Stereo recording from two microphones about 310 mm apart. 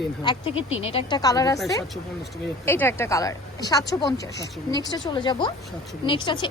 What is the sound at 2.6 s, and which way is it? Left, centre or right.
A woman's voice, centre.